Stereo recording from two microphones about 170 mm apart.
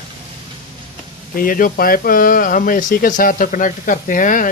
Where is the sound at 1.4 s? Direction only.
55° left (ahead or behind).